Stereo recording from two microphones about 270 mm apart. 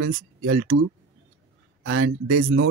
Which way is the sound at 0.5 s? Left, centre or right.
Right.